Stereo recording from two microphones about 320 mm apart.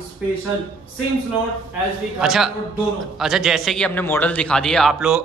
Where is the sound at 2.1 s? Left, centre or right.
Centre.